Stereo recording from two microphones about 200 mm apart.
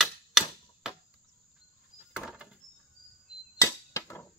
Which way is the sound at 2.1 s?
5° right (ahead or behind).